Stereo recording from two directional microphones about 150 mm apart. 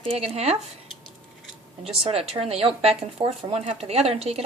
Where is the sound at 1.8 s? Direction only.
40° right (ahead or behind).